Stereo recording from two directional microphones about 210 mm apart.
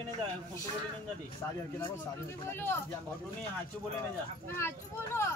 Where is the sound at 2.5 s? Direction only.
10° left (ahead or behind).